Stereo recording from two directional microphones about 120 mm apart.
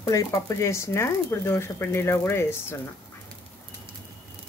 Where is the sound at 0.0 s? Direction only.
25° left (ahead or behind).